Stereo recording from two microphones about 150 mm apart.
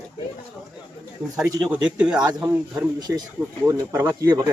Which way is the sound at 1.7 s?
5° right (ahead or behind).